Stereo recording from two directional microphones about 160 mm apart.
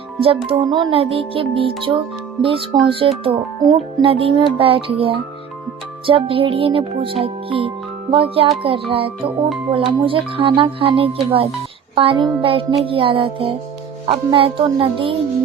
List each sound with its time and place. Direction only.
0.4 s speech: 30° right (ahead or behind)